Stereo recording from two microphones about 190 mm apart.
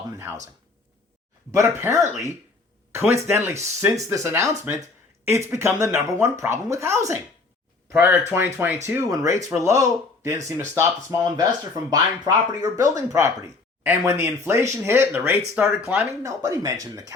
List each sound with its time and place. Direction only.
1.5 s speech: 15° right (ahead or behind)